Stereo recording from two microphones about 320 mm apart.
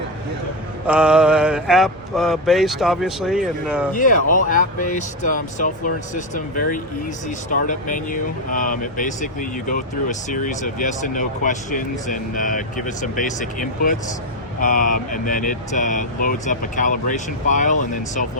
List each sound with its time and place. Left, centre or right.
0.9 s speech: centre
3.9 s speech: left